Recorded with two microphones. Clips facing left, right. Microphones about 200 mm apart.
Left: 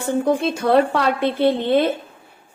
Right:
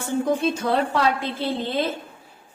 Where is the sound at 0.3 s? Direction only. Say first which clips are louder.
Left 4 dB; 65° left (ahead or behind).